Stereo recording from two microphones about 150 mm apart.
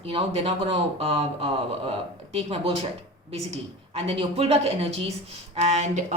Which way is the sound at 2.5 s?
40° right (ahead or behind).